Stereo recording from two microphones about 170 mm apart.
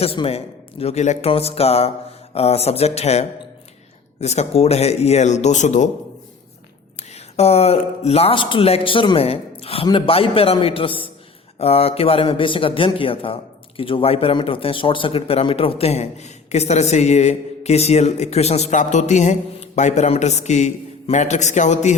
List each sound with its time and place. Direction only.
0.0 s speech: 35° left (ahead or behind)
7.3 s speech: 40° left (ahead or behind)